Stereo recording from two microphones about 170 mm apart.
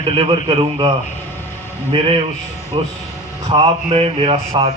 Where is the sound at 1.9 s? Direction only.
30° right (ahead or behind).